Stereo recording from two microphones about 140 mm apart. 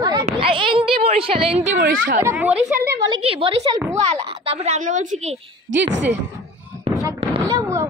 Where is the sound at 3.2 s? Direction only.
45° right (ahead or behind); by 5.1 s 60° right (ahead or behind).